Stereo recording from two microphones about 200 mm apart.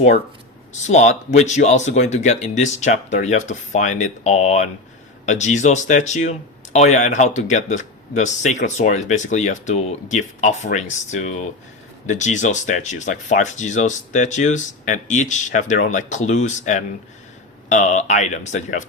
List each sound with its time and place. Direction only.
0.7 s speech: 35° left (ahead or behind)